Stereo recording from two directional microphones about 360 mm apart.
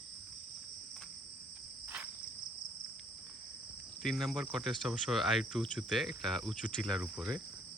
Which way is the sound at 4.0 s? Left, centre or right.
Centre.